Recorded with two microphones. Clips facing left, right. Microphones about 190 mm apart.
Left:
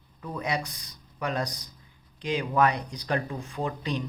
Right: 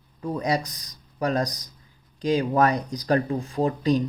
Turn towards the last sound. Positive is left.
turn(degrees=-40)  # may be behind; listen again after turning